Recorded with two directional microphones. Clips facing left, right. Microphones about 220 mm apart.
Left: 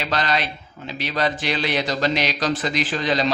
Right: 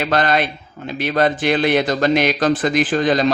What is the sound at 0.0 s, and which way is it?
Speech, 50° right (ahead or behind).